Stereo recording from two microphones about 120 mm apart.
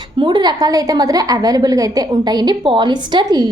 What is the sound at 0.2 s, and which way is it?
A woman's voice, 40° right (ahead or behind).